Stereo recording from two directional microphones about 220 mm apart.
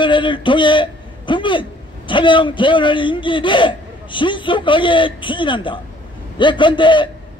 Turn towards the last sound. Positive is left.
turn(degrees=20)  # may be behind; listen again after turning